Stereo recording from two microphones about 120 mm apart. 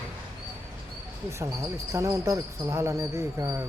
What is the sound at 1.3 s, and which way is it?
Speech, 25° right (ahead or behind).